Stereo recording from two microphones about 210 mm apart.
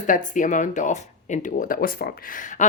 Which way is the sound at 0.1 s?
40° left (ahead or behind).